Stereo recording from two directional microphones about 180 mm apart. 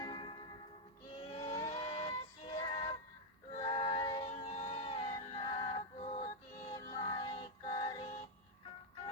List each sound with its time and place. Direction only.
0.0 s music: 25° left (ahead or behind)
3.5 s a sound: 30° left (ahead or behind)
6.7 s music: 25° left (ahead or behind)